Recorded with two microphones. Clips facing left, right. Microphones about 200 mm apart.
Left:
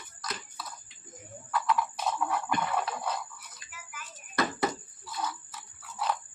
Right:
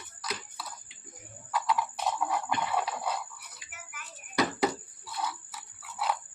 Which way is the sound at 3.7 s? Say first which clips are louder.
Left 1 dB; 65° right (ahead or behind).